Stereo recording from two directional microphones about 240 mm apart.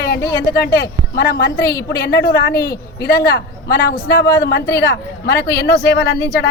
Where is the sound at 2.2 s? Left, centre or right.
Left.